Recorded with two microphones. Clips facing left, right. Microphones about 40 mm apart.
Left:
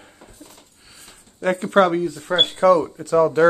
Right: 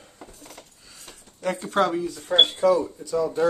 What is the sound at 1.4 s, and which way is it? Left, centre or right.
Speech, left.